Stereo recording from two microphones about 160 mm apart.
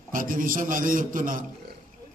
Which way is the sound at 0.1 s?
60° right (ahead or behind).